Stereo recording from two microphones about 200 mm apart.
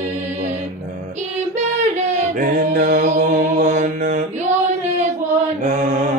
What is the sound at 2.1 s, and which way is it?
Mantra, 40° right (ahead or behind).